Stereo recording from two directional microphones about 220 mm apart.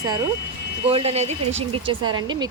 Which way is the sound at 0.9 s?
25° right (ahead or behind).